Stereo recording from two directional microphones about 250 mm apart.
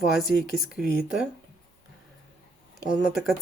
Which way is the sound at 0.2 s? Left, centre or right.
Centre.